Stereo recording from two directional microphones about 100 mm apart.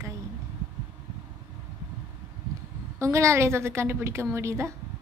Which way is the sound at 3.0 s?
30° right (ahead or behind).